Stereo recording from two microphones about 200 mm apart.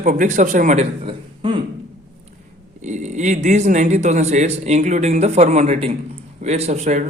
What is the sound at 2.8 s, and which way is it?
Speech, 35° right (ahead or behind).